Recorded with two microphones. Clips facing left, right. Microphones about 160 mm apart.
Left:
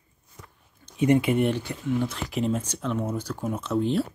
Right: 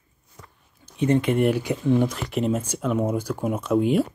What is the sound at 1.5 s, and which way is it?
Speech, 10° right (ahead or behind).